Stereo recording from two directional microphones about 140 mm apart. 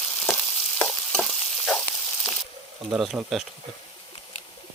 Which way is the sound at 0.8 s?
5° left (ahead or behind).